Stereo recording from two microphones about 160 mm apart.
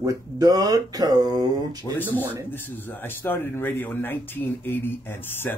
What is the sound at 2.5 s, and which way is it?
A man's voice, 10° left (ahead or behind).